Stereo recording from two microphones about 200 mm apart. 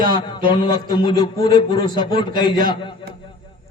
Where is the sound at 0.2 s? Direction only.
20° left (ahead or behind).